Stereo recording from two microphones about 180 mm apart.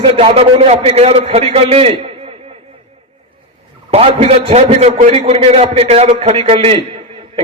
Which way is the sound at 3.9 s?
35° right (ahead or behind).